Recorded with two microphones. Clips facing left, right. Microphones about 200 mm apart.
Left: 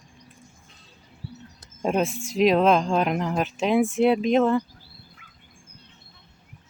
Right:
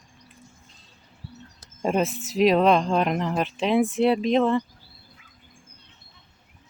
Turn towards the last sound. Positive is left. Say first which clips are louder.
# left 2 dB
turn(degrees=65)  # may be behind; listen again after turning